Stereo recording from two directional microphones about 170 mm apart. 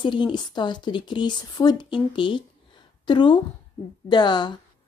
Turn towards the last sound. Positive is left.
turn(degrees=25)  # may be behind; listen again after turning